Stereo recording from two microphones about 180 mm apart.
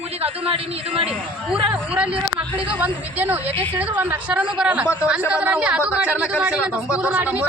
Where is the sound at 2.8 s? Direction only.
10° right (ahead or behind).